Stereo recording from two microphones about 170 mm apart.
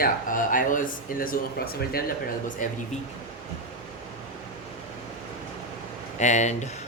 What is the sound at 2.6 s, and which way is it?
Speech, 50° left (ahead or behind).